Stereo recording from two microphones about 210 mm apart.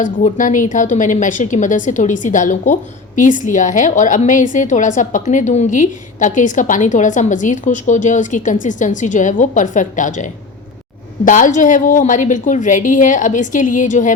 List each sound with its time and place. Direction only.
0.0 s a woman's voice: 40° left (ahead or behind)
11.3 s a woman's voice: 35° left (ahead or behind)